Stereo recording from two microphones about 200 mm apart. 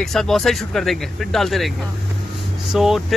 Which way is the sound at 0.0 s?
Centre (ahead or behind).